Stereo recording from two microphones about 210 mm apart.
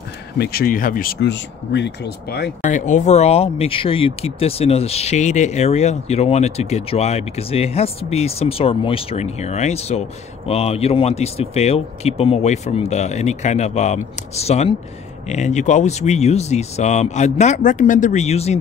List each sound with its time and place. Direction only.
0.4 s speech: 45° left (ahead or behind)
2.6 s speech: 35° left (ahead or behind)